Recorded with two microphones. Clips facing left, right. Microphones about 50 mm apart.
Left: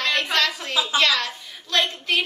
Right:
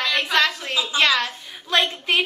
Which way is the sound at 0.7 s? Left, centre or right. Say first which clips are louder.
Left 1 dB; left.